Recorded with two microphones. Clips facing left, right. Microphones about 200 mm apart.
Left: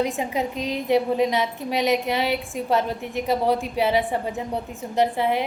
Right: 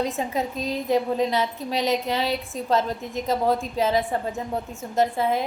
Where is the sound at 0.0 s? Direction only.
15° left (ahead or behind).